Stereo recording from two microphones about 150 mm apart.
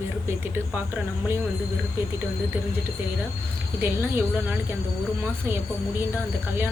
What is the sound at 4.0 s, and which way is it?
Speech, 15° right (ahead or behind).